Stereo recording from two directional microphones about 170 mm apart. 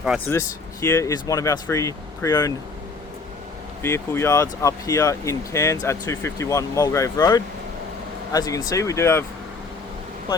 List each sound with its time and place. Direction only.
0.3 s speech: 20° left (ahead or behind)
3.8 s speech: 15° left (ahead or behind)